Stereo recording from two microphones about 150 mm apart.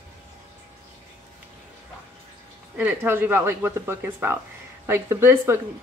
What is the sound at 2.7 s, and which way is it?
Speech, 10° right (ahead or behind).